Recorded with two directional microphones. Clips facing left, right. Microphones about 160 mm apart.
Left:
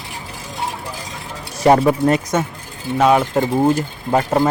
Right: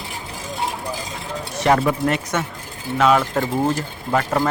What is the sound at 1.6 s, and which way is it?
Speech, 30° left (ahead or behind).